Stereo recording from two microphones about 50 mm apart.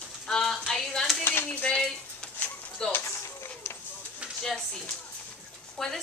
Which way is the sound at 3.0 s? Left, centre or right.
Left.